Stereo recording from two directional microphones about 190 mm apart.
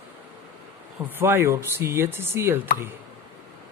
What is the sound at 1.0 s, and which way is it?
Speech, 10° right (ahead or behind).